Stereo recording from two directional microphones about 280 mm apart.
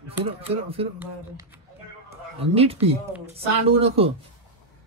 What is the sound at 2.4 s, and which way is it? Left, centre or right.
A man's voice, right.